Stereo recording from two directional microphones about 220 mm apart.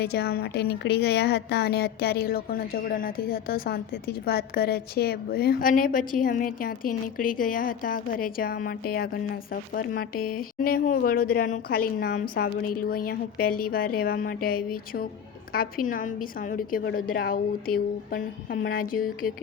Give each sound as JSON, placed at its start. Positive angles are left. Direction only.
{"t": 0.0, "sound": "a woman's voice", "side_deg": 45}